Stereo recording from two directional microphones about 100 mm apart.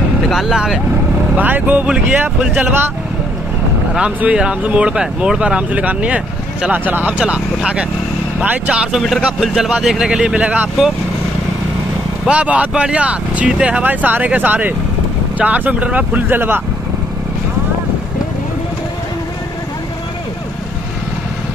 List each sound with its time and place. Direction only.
0.3 s speech: 5° right (ahead or behind)
1.3 s speech: 15° right (ahead or behind)
3.9 s speech: 10° right (ahead or behind)
12.3 s speech: 15° right (ahead or behind)